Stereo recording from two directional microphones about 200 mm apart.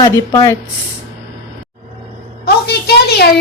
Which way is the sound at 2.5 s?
55° left (ahead or behind).